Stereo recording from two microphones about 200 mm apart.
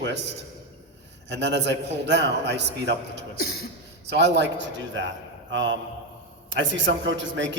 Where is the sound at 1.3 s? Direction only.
60° right (ahead or behind).